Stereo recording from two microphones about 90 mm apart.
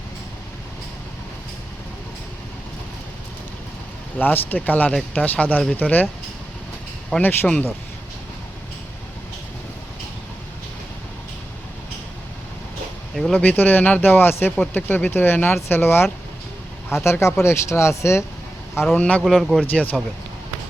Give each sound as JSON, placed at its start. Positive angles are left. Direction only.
{"t": 4.2, "sound": "speech", "side_deg": 20}
{"t": 7.1, "sound": "speech", "side_deg": 15}
{"t": 13.1, "sound": "speech", "side_deg": 5}
{"t": 13.4, "sound": "speech", "side_deg": 20}
{"t": 18.9, "sound": "speech", "side_deg": 15}
{"t": 19.2, "sound": "speech", "side_deg": 0}
{"t": 19.7, "sound": "speech", "side_deg": 15}